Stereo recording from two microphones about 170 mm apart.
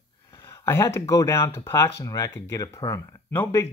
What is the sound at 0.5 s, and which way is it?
Speech, 15° left (ahead or behind).